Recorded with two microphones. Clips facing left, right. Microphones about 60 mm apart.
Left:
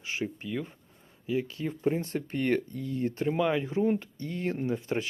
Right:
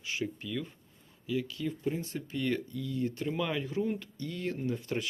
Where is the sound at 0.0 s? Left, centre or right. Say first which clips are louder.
Left 2 dB; left.